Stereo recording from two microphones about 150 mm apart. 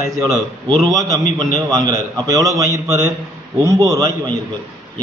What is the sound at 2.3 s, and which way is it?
A man's voice, 25° right (ahead or behind).